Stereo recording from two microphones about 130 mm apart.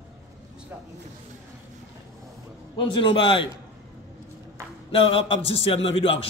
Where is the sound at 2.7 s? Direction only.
40° left (ahead or behind).